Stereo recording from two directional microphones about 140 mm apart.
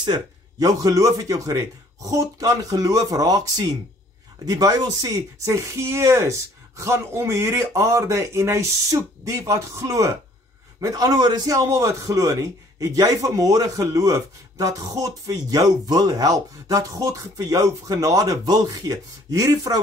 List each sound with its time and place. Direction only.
0.0 s a man's voice: 30° right (ahead or behind)